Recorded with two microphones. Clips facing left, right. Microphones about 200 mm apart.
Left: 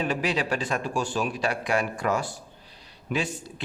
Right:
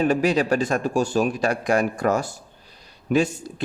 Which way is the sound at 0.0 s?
45° right (ahead or behind).